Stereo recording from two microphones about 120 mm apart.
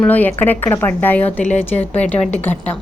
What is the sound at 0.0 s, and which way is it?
A woman's voice, 15° left (ahead or behind).